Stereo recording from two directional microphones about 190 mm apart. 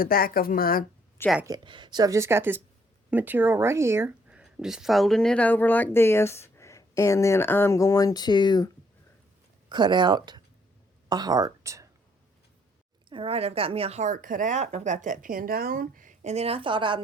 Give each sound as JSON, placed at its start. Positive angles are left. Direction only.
{"t": 0.0, "sound": "speech", "side_deg": 50}
{"t": 1.5, "sound": "speech", "side_deg": -25}
{"t": 9.6, "sound": "speech", "side_deg": -25}
{"t": 13.1, "sound": "a woman's voice", "side_deg": -30}